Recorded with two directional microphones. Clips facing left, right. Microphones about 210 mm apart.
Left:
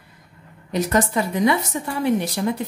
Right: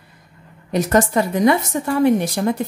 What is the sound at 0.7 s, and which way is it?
Speech, 45° right (ahead or behind).